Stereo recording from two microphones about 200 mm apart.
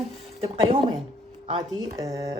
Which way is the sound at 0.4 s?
25° right (ahead or behind).